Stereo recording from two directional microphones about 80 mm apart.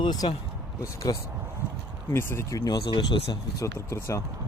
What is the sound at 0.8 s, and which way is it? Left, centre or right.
Speech, left.